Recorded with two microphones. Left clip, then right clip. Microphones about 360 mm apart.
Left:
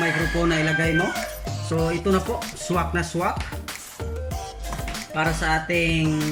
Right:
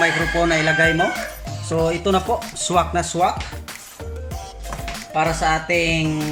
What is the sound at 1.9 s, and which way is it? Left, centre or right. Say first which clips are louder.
Speech: right 4 dB; centre.